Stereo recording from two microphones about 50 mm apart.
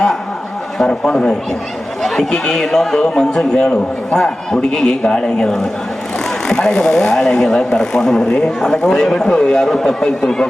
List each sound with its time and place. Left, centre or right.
0.8 s a man's voice: centre